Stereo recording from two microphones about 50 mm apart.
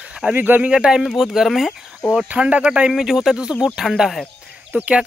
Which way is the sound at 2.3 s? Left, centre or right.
Right.